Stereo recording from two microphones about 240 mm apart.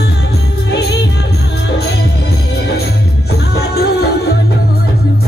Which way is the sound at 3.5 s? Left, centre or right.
Left.